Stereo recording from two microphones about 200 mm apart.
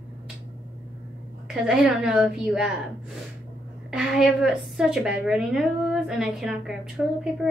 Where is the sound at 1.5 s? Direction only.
Centre (ahead or behind).